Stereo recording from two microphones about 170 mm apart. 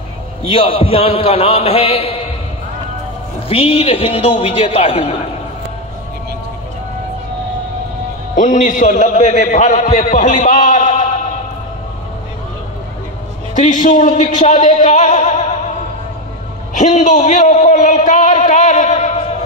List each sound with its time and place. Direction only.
0.5 s a man's voice: 35° left (ahead or behind)
3.4 s a man's voice: 35° left (ahead or behind)
8.4 s a man's voice: 50° left (ahead or behind)
10.4 s a sound: 50° left (ahead or behind)
13.6 s a man's voice: 45° left (ahead or behind)
16.7 s a man's voice: 45° left (ahead or behind)